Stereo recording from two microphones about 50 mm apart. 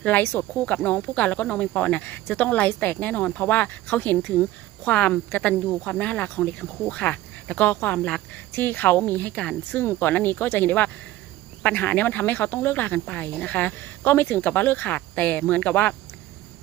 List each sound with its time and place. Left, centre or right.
0.5 s speech: left
1.0 s speech: left
2.0 s speech: left
4.0 s speech: left
4.9 s speech: left
6.2 s speech: left
6.8 s speech: left
8.5 s speech: left
12.7 s speech: left
14.0 s speech: left